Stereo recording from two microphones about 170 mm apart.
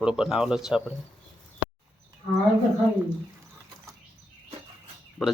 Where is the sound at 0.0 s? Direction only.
5° right (ahead or behind).